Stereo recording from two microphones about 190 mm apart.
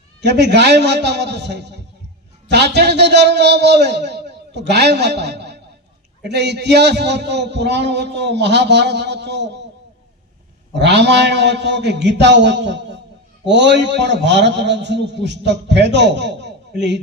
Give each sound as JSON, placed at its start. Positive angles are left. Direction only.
{"t": 0.2, "sound": "a man's voice", "side_deg": -65}
{"t": 10.8, "sound": "a man's voice", "side_deg": -65}